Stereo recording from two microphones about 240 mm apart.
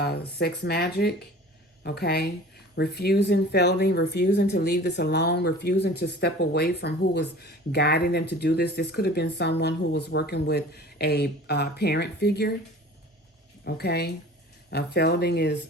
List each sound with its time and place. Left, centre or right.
0.0 s speech: left
13.7 s speech: left